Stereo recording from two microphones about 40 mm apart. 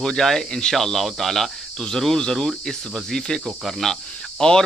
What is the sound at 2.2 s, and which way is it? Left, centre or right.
Speech, centre.